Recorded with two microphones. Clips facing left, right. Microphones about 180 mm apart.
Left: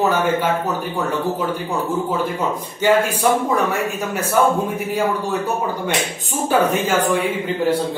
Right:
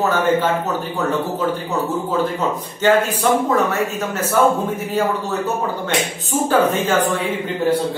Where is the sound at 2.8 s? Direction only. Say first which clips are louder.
Even; 10° left (ahead or behind).